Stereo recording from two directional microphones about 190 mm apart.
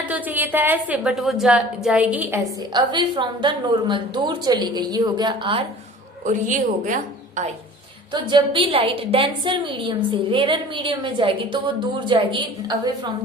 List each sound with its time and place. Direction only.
0.1 s a woman's voice: 10° right (ahead or behind)
2.7 s a woman's voice: 25° right (ahead or behind)
6.2 s a woman's voice: 45° right (ahead or behind)
8.1 s a woman's voice: 25° right (ahead or behind)